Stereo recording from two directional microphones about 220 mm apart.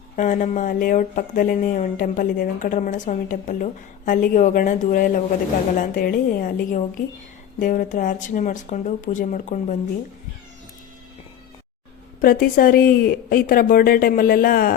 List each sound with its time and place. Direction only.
0.2 s speech: 35° left (ahead or behind)
12.2 s speech: 40° left (ahead or behind)